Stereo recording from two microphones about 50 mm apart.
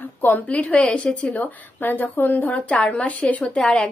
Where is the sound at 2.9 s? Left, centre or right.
Left.